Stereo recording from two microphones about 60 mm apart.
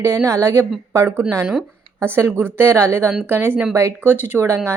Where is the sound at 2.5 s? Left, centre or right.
Right.